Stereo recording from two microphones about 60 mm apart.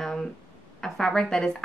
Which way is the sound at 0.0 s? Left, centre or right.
Centre.